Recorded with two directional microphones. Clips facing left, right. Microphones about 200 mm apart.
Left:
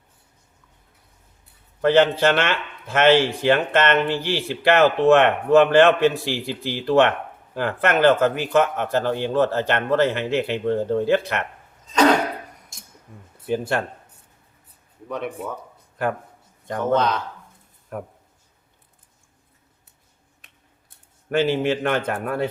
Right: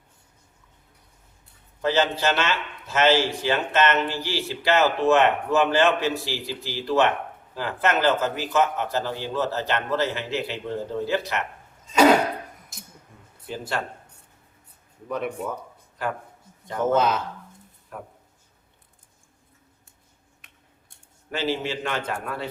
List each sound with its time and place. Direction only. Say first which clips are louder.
1.8 s speech: left 6 dB; 55° left (ahead or behind)
12.7 s a sound: right 3 dB; centre (ahead or behind)
13.5 s speech: left 7 dB; 55° left (ahead or behind)
15.1 s speech: even; centre (ahead or behind)
16.7 s speech: left 1 dB; 5° right (ahead or behind)
17.9 s speech: left 7 dB; 55° left (ahead or behind)
21.2 s a man's voice: left 7 dB; 55° left (ahead or behind)